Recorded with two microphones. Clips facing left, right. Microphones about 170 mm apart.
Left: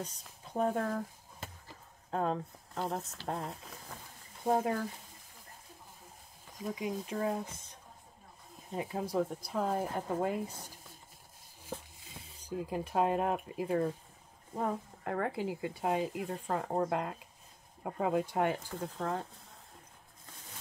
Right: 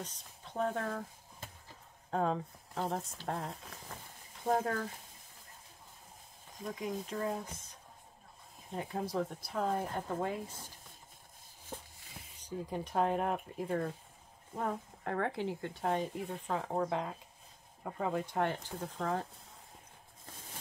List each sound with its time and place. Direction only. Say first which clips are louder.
0.0 s speech: left 3 dB; 10° left (ahead or behind)
2.0 s speech: even; centre (ahead or behind)
4.5 s speech: left 2 dB; 15° left (ahead or behind)
6.6 s speech: left 2 dB; 10° left (ahead or behind)
8.7 s speech: left 2 dB; 5° left (ahead or behind)
12.6 s speech: left 1 dB; 5° left (ahead or behind)
18.8 s speech: even; centre (ahead or behind)